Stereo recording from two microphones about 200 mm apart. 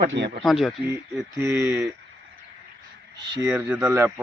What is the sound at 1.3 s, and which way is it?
Speech, 15° right (ahead or behind).